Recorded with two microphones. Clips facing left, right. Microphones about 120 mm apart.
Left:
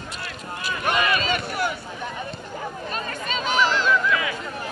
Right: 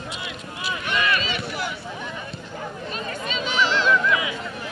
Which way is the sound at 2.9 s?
45° left (ahead or behind).